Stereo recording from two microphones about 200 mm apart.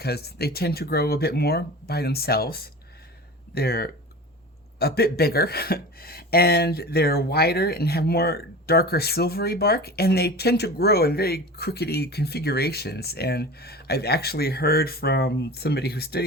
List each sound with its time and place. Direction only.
0.0 s speech: 50° left (ahead or behind)